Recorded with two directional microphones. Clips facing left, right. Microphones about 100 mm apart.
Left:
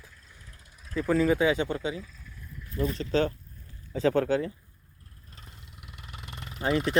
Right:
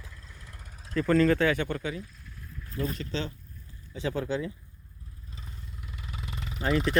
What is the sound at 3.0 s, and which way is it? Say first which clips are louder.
Speech: left 8 dB; 45° left (ahead or behind).